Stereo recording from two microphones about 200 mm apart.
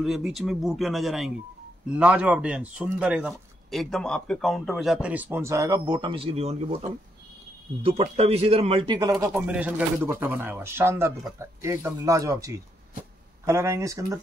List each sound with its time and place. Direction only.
0.0 s speech: centre (ahead or behind); by 6.9 s 30° right (ahead or behind)
8.0 s speech: 30° right (ahead or behind)
9.2 s speech: 10° right (ahead or behind)